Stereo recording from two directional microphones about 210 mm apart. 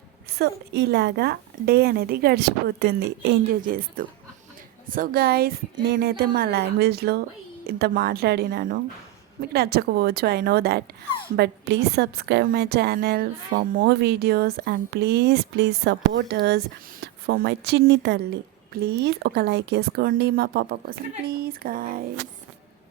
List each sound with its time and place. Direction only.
0.3 s a woman's voice: 50° right (ahead or behind)
4.9 s a woman's voice: 45° right (ahead or behind)